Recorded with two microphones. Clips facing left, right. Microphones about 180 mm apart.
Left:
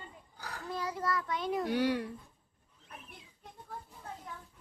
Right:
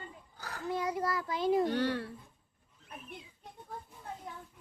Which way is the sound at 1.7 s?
10° left (ahead or behind).